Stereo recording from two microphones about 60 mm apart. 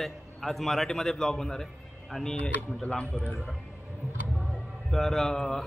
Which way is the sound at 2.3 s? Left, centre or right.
Centre.